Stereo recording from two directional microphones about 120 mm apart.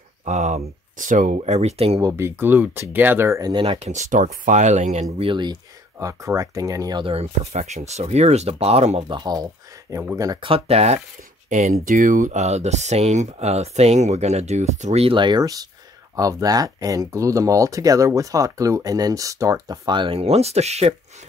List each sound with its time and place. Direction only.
0.2 s speech: 80° right; by 2.0 s 60° right (ahead or behind)
2.0 s speech: 25° right (ahead or behind)
3.5 s speech: 40° right (ahead or behind)
3.8 s speech: 85° right
5.2 s speech: 40° right (ahead or behind)
5.9 s speech: 25° right (ahead or behind)
7.1 s speech: 65° right (ahead or behind)
9.1 s speech: 35° right (ahead or behind)
10.4 s speech: 55° right (ahead or behind)
11.4 s speech: 90° right; by 15.0 s 75° right (ahead or behind)
15.0 s speech: 40° right (ahead or behind)
20.2 s speech: 60° right (ahead or behind)